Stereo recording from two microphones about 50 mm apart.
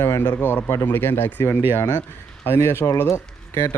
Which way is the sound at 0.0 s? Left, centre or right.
Left.